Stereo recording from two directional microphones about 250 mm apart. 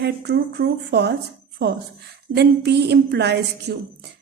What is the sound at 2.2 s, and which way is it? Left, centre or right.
A woman's voice, right.